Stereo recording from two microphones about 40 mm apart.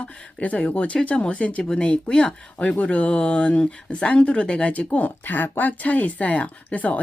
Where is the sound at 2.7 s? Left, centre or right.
Left.